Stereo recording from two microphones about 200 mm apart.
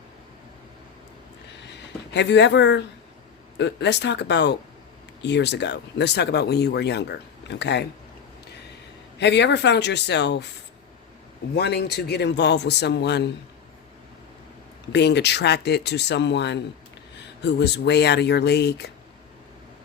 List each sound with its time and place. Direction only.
2.1 s speech: 60° left (ahead or behind)
9.1 s speech: 60° left (ahead or behind)
11.5 s speech: 55° left (ahead or behind)
14.9 s speech: 60° left (ahead or behind)